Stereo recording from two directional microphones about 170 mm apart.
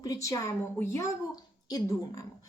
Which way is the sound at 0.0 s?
20° left (ahead or behind).